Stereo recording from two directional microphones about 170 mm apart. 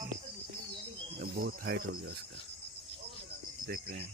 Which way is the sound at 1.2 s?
65° right (ahead or behind).